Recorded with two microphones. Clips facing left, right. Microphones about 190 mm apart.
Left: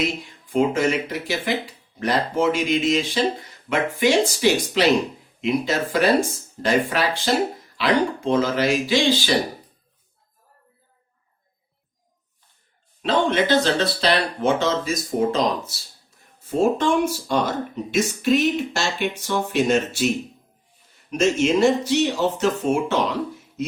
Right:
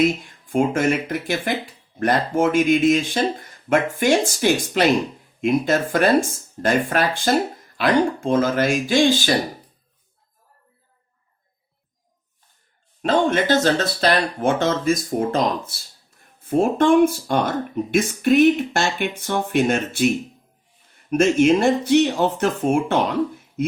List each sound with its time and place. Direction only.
0.0 s speech: 50° right (ahead or behind)
13.0 s speech: 45° right (ahead or behind)
21.1 s speech: 55° right (ahead or behind)